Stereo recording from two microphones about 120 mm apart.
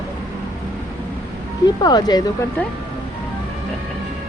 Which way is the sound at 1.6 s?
35° left (ahead or behind).